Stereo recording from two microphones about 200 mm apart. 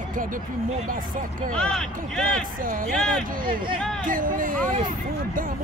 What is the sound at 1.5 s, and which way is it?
Speech, 5° left (ahead or behind).